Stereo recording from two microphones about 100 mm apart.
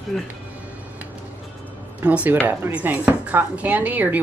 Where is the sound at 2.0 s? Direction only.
15° right (ahead or behind).